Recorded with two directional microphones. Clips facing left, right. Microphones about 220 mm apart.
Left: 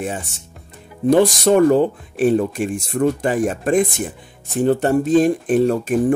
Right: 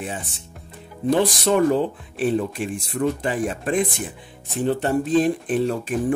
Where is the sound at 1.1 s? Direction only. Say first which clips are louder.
Left 6 dB; 45° left (ahead or behind).